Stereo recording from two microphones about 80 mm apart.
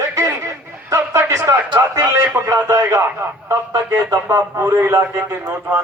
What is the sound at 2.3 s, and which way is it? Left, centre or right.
A man's voice, right.